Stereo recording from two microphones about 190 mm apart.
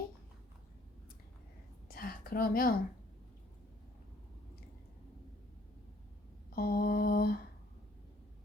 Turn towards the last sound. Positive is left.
turn(degrees=50)  # may be behind; listen again after turning